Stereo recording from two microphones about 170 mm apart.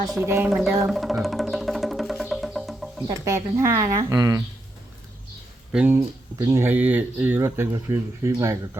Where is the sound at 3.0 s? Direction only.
20° right (ahead or behind).